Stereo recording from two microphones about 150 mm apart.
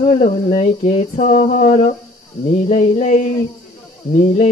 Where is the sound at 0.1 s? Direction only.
50° left (ahead or behind).